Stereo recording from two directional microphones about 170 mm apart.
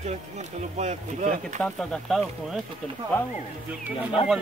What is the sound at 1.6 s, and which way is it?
Speech, 5° left (ahead or behind).